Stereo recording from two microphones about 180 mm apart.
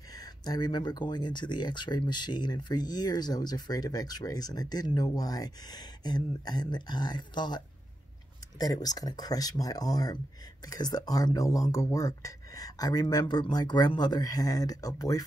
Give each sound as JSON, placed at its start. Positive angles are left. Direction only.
{"t": 0.1, "sound": "speech", "side_deg": 20}